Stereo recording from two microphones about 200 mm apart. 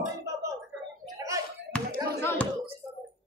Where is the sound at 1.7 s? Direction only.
5° left (ahead or behind).